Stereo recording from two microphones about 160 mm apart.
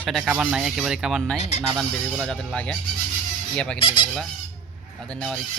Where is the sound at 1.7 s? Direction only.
Centre (ahead or behind).